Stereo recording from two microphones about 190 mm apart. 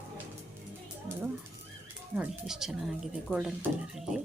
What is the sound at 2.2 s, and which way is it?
Speech, 5° right (ahead or behind).